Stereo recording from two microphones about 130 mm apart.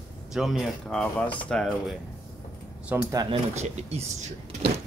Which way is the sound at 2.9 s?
15° right (ahead or behind).